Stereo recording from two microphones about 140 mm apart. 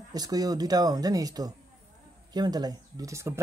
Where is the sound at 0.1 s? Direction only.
25° right (ahead or behind).